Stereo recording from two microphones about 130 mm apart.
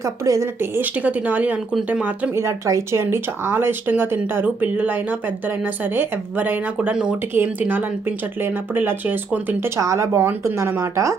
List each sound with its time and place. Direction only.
0.0 s speech: 25° right (ahead or behind)
2.3 s speech: 20° right (ahead or behind)